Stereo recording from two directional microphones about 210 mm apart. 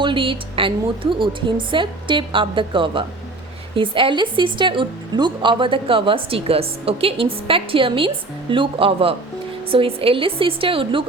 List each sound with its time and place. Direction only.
0.0 s a woman's voice: 25° right (ahead or behind)